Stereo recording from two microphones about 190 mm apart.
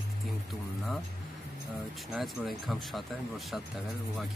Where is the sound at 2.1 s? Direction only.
Centre (ahead or behind).